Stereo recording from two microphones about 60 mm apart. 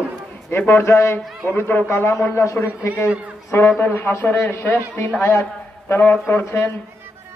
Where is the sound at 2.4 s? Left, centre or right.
Left.